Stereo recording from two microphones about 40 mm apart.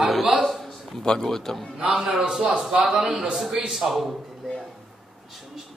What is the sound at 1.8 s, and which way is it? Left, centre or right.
A man's voice, centre.